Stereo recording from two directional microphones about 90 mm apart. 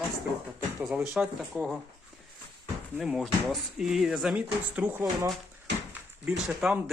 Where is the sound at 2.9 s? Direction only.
5° right (ahead or behind).